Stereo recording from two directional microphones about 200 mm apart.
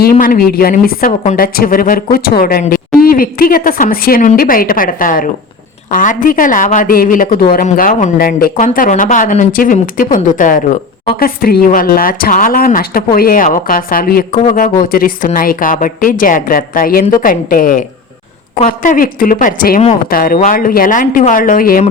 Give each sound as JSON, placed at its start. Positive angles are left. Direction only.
{"t": 0.0, "sound": "a woman's voice", "side_deg": 45}